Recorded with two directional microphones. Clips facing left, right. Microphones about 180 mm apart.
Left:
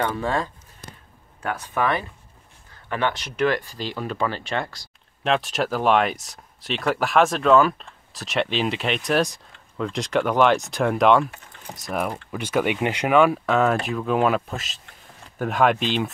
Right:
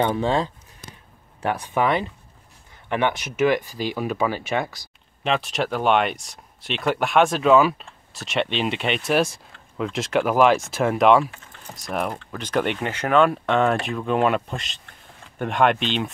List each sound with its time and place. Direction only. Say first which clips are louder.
0.0 s speech: right 3 dB; 20° right (ahead or behind); by 16.1 s centre (ahead or behind)